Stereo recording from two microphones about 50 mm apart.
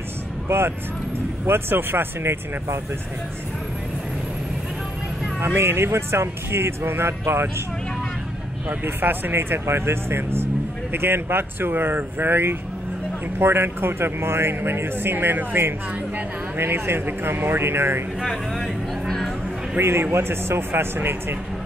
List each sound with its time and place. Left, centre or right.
0.5 s speech: right
5.4 s speech: right
8.6 s speech: right
18.5 s a sound: centre
19.8 s speech: right